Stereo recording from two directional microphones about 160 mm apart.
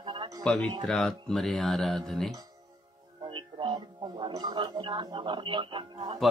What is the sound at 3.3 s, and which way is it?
Speech, 30° right (ahead or behind).